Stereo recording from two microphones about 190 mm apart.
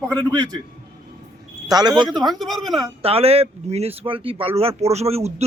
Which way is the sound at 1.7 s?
20° right (ahead or behind).